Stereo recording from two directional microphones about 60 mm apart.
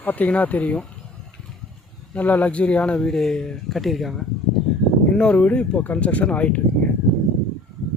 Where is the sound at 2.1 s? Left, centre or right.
Left.